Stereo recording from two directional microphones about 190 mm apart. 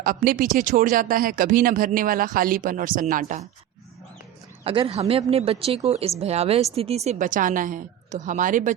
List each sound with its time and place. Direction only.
0.0 s speech: 50° right (ahead or behind)
4.6 s speech: 30° right (ahead or behind)